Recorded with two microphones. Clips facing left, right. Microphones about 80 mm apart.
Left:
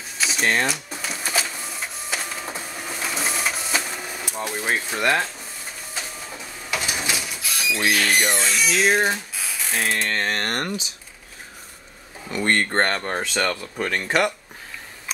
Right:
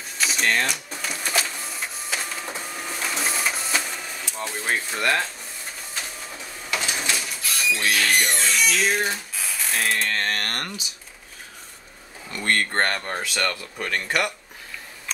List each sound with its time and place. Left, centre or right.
0.2 s printer: centre
6.7 s a sound: centre
8.4 s music: centre
8.8 s speech: left
9.1 s a sound: centre
10.3 s speech: left
12.5 s speech: centre